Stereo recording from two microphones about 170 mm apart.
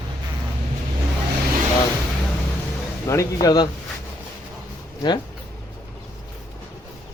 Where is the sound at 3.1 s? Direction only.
20° left (ahead or behind).